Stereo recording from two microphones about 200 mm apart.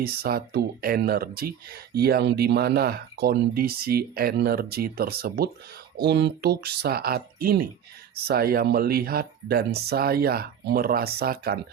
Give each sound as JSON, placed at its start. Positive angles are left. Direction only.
{"t": 0.0, "sound": "speech", "side_deg": -50}